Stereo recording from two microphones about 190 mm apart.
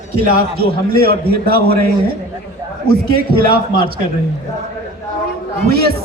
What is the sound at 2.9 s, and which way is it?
Speech, 55° right (ahead or behind).